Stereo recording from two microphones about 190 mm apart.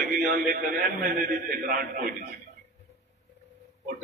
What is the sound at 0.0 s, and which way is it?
A man's voice, 45° right (ahead or behind).